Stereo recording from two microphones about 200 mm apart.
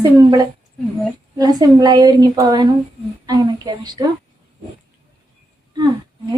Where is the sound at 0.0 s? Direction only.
20° right (ahead or behind).